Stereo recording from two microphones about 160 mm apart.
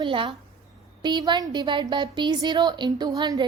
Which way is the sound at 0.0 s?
30° right (ahead or behind).